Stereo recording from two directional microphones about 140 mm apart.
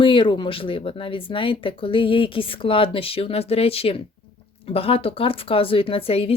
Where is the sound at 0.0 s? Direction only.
35° left (ahead or behind).